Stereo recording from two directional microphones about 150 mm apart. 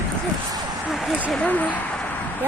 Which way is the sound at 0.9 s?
Centre (ahead or behind).